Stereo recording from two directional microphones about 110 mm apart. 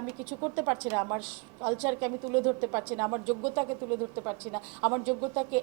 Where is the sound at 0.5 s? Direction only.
20° right (ahead or behind).